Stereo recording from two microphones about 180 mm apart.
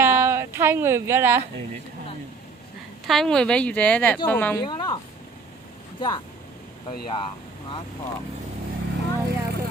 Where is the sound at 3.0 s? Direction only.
Centre (ahead or behind).